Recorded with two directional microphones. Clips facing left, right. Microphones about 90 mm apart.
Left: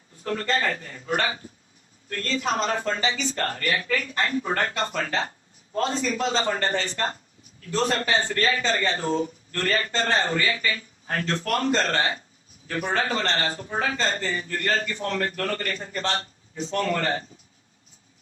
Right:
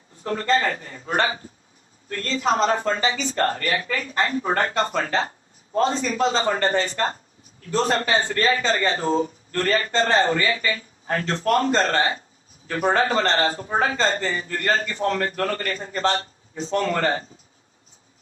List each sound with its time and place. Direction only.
0.3 s speech: 30° right (ahead or behind)